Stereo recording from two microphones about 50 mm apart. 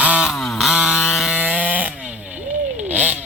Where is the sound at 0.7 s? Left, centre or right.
Centre.